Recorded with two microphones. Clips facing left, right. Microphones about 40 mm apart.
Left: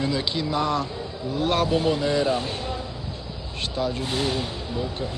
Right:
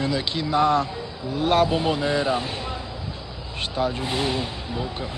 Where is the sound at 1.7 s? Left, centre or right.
Centre.